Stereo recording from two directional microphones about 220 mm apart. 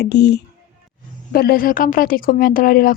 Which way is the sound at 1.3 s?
45° left (ahead or behind).